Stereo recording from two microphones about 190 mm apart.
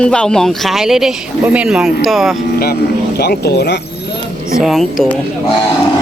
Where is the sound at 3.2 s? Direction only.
55° left (ahead or behind).